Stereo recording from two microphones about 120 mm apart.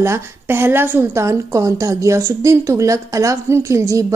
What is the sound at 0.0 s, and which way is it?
Speech, 20° right (ahead or behind).